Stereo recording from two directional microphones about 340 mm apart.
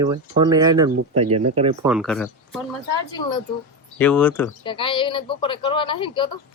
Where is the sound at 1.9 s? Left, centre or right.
Centre.